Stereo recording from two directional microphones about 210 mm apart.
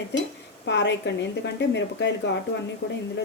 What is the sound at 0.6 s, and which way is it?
Speech, 55° left (ahead or behind).